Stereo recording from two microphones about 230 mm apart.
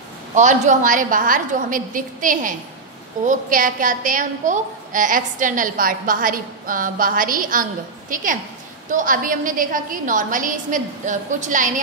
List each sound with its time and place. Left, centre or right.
0.3 s a woman's voice: right